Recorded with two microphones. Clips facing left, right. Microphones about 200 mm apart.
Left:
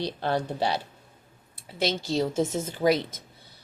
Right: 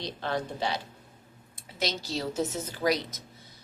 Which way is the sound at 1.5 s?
55° left (ahead or behind).